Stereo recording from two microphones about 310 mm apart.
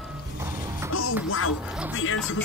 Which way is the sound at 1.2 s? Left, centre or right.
Left.